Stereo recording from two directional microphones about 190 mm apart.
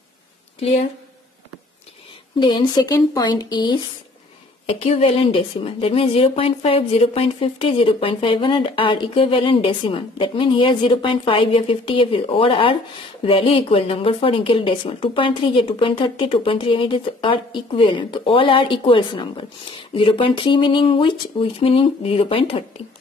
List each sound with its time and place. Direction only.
0.6 s speech: 30° left (ahead or behind)
2.4 s a woman's voice: 25° left (ahead or behind)
4.6 s a woman's voice: 35° left (ahead or behind)